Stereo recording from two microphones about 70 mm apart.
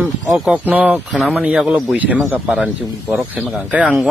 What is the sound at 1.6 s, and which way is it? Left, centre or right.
Speech, centre.